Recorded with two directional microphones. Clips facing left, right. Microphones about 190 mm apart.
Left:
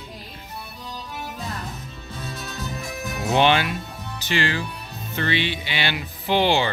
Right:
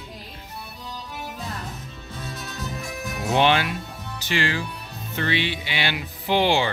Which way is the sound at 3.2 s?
Centre (ahead or behind).